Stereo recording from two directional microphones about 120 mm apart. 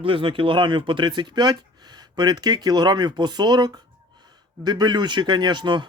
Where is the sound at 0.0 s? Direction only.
45° right (ahead or behind).